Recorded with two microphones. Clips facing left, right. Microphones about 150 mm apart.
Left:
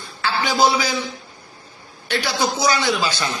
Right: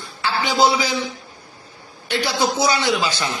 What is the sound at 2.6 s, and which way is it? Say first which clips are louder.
Speech: right 1 dB; 20° right (ahead or behind).